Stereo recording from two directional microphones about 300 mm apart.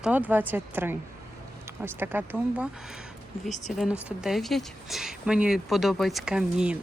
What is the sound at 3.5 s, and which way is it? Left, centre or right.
Speech, left.